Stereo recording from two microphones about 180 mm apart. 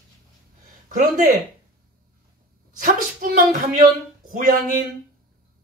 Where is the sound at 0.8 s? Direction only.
45° right (ahead or behind).